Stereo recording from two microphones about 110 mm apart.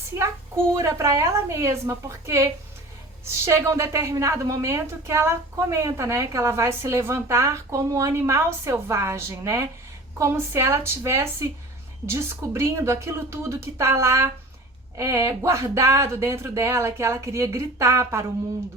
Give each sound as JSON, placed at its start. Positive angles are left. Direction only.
{"t": 0.2, "sound": "a woman's voice", "side_deg": -25}